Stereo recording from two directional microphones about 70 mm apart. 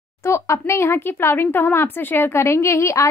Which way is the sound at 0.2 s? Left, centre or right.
Left.